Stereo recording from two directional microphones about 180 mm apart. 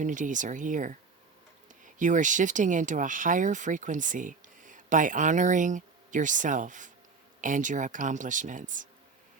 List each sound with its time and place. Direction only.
0.0 s speech: 45° right (ahead or behind)